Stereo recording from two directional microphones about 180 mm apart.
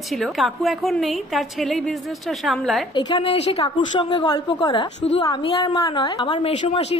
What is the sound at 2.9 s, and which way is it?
A woman's voice, 30° left (ahead or behind).